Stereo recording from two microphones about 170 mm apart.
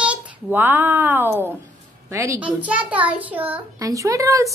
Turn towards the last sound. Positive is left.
turn(degrees=-20)  # may be behind; listen again after turning